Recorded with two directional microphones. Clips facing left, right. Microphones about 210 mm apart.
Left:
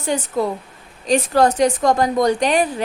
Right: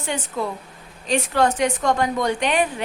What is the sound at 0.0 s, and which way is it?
A woman's voice, 40° left (ahead or behind).